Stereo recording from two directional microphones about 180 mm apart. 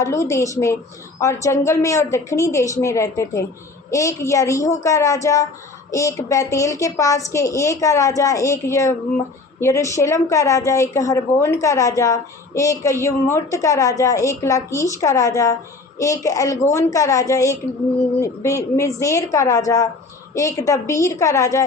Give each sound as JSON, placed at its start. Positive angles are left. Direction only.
{"t": 0.0, "sound": "a woman's voice", "side_deg": 15}